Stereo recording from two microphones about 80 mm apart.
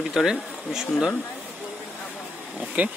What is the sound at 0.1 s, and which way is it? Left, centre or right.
Speech, centre.